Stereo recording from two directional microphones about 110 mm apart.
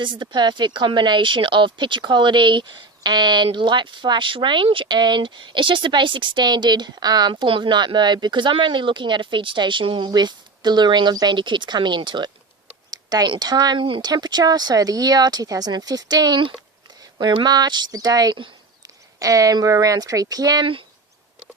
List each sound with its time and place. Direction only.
0.0 s speech: 45° right (ahead or behind)
13.8 s speech: 50° right (ahead or behind)
14.1 s speech: 40° right (ahead or behind)